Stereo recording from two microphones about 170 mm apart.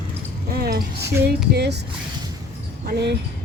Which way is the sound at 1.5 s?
80° right.